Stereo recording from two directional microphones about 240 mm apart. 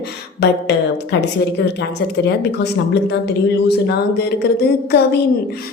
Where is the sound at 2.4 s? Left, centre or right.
Left.